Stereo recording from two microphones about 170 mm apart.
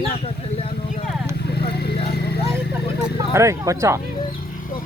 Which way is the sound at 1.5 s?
70° left (ahead or behind).